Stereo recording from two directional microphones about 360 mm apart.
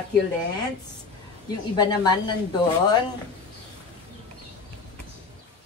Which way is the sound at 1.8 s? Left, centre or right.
Centre.